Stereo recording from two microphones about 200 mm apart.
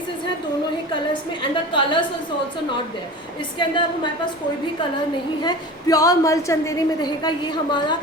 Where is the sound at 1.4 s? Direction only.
25° left (ahead or behind).